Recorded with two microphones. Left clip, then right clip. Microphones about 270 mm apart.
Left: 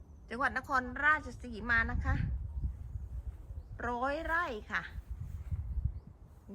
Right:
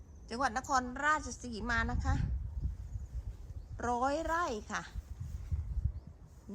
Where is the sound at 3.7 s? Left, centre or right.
Centre.